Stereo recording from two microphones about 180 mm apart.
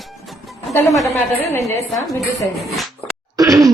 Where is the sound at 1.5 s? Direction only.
15° left (ahead or behind).